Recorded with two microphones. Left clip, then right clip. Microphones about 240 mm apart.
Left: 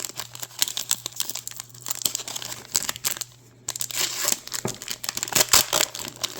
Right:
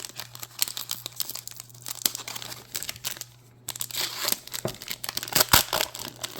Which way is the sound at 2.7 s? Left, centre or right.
Centre.